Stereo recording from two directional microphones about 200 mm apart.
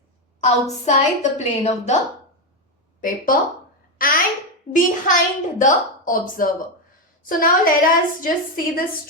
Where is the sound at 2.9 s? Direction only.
45° left (ahead or behind).